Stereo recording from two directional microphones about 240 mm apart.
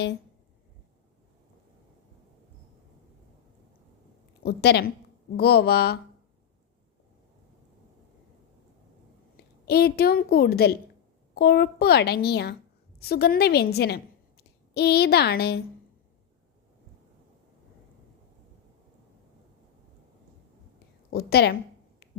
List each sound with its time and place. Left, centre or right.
4.4 s a woman's voice: left
9.6 s a woman's voice: left
21.1 s a woman's voice: left